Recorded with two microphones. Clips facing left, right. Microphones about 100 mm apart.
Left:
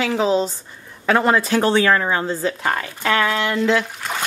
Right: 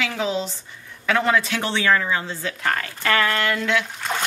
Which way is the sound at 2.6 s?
20° left (ahead or behind).